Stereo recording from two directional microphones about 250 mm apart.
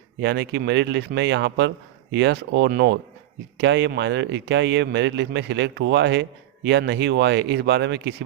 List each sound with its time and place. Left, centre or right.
0.2 s speech: right